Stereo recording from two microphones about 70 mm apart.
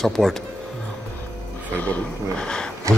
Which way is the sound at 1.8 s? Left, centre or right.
Left.